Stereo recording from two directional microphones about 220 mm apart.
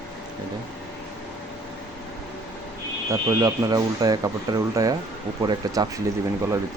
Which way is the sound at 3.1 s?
15° right (ahead or behind).